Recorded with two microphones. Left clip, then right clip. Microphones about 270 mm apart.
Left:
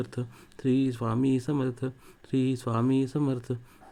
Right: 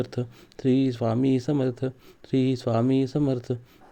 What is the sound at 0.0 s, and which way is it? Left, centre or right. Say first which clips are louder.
Speech: right 5 dB; centre.